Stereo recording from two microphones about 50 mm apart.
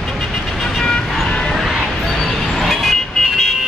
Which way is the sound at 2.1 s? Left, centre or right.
Centre.